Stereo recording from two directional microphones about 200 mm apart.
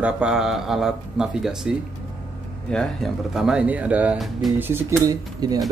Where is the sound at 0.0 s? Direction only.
5° right (ahead or behind).